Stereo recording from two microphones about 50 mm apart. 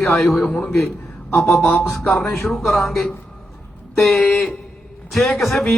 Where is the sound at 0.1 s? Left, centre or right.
Centre.